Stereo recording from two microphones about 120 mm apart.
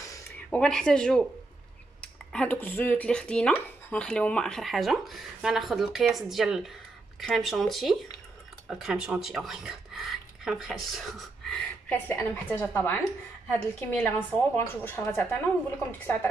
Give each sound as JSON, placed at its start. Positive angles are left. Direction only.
{"t": 0.5, "sound": "speech", "side_deg": 5}
{"t": 11.9, "sound": "a woman's voice", "side_deg": 15}